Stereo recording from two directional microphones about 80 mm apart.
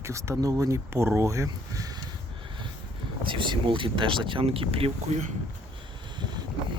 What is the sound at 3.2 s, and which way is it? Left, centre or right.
Speech, right.